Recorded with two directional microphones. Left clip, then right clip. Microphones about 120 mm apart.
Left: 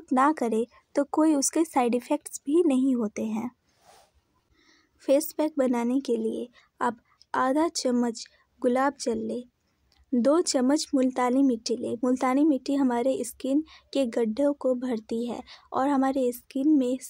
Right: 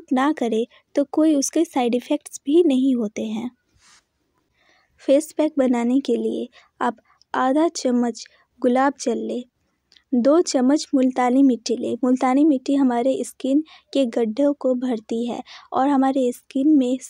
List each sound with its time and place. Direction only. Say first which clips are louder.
0.1 s speech: right 3 dB; 40° right (ahead or behind)
5.0 s speech: right 6 dB; 30° right (ahead or behind)
10.1 s speech: right 6 dB; 25° right (ahead or behind)